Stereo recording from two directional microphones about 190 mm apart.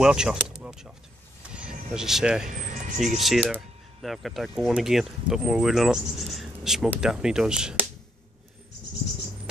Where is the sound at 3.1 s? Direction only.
Centre (ahead or behind).